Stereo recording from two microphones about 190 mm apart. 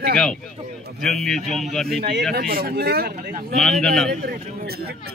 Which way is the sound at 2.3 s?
50° right (ahead or behind).